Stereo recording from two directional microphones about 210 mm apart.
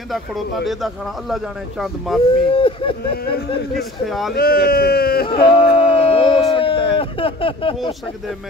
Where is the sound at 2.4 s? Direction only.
25° left (ahead or behind).